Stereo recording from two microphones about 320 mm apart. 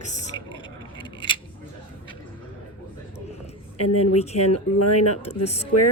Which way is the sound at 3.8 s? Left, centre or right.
Left.